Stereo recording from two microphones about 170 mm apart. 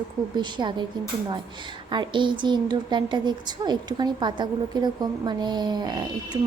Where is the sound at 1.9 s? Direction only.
25° right (ahead or behind).